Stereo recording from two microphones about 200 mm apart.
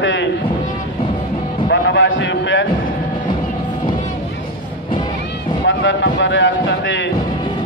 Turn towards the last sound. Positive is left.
turn(degrees=70)  # may be behind; listen again after turning